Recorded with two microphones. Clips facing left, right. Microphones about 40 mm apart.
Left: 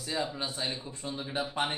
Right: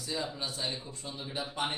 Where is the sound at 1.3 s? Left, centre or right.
Left.